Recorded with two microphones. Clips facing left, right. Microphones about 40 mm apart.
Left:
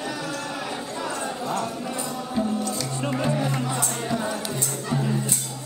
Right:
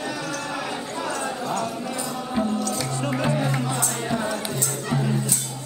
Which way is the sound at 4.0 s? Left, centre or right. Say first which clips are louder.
Right 1 dB; centre.